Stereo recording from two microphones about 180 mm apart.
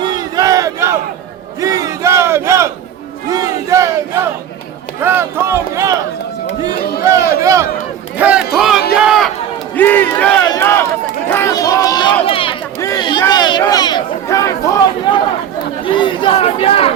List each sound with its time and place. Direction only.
0.0 s battle cry: 20° right (ahead or behind)
4.9 s speech: 15° right (ahead or behind)
8.2 s a sound: 5° right (ahead or behind)
9.7 s battle cry: 10° left (ahead or behind)
10.5 s speech: 15° left (ahead or behind)
12.2 s a sound: 30° left (ahead or behind)
15.8 s speech: 25° left (ahead or behind)